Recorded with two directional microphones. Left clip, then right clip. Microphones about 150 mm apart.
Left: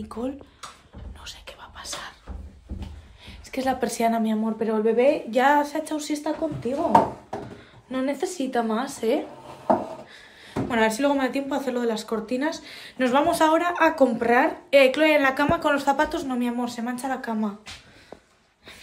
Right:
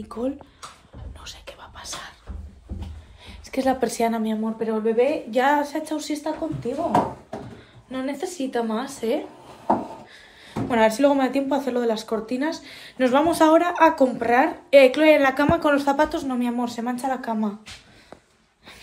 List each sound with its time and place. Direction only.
0.2 s a woman's voice: 15° left (ahead or behind)
1.2 s whispering: 5° left (ahead or behind)
3.3 s a woman's voice: 10° left (ahead or behind)
7.9 s speech: 35° left (ahead or behind)
10.4 s speech: 10° left (ahead or behind)
12.4 s a woman's voice: 20° left (ahead or behind)